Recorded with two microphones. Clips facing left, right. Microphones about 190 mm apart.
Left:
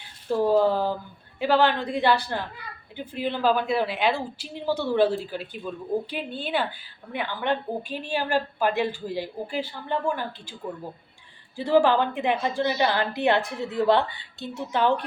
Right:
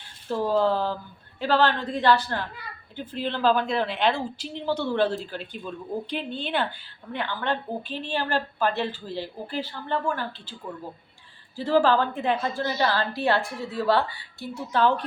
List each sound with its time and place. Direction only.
0.3 s a woman's voice: 10° left (ahead or behind)
11.5 s a woman's voice: 15° left (ahead or behind)